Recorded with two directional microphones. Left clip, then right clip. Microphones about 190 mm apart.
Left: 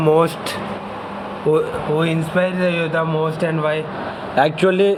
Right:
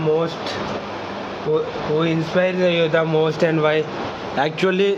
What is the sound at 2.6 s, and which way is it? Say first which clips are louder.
Speech: right 2 dB; 20° right (ahead or behind).